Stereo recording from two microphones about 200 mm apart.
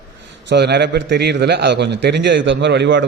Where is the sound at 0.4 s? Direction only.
60° right (ahead or behind).